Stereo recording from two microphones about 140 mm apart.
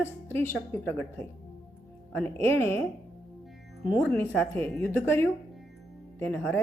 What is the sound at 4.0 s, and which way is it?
Speech, 15° left (ahead or behind).